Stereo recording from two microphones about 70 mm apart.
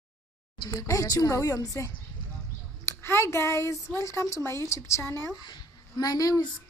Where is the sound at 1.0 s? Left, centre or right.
Left.